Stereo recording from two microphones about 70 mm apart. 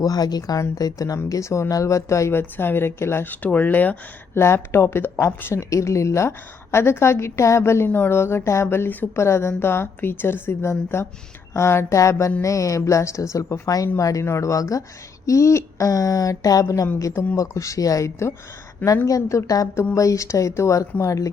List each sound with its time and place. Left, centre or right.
0.0 s speech: left
2.4 s a woman's voice: left
3.4 s speech: left
4.4 s a woman's voice: left
7.9 s a woman's voice: left
19.0 s speech: left